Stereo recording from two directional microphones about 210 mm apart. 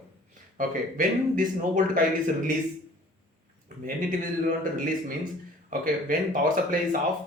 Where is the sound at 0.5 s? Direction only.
40° right (ahead or behind).